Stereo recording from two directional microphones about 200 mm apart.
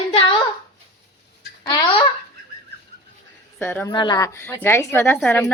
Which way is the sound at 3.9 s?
20° left (ahead or behind).